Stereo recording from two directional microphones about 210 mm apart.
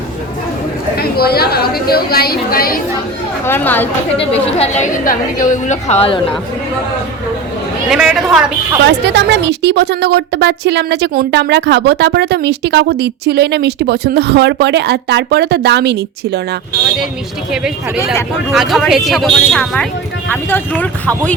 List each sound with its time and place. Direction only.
0.9 s a woman's voice: 45° left (ahead or behind)
3.4 s speech: 10° left (ahead or behind)
4.2 s a woman's voice: 30° left (ahead or behind)
7.9 s speech: centre (ahead or behind)
8.8 s a woman's voice: 55° right (ahead or behind)
18.5 s speech: centre (ahead or behind)